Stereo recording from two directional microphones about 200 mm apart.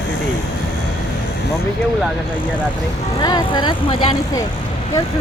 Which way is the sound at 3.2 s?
20° left (ahead or behind).